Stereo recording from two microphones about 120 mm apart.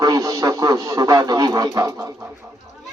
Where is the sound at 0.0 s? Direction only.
30° right (ahead or behind).